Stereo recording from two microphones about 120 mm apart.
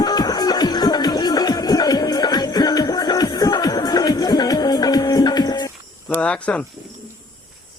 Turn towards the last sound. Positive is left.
turn(degrees=10)  # may be behind; listen again after turning